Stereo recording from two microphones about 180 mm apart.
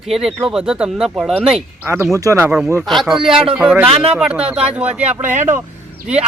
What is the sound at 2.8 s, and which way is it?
Speech, centre (ahead or behind).